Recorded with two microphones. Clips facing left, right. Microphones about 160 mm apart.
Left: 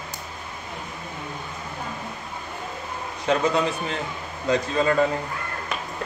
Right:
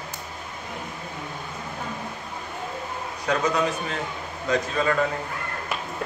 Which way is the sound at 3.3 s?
25° left (ahead or behind).